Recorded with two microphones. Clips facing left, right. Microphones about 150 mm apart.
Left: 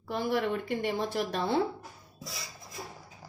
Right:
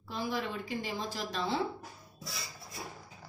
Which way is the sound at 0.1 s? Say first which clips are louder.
Left 6 dB; 60° left (ahead or behind).